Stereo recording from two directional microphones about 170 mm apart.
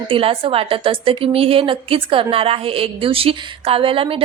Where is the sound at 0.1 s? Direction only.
30° right (ahead or behind).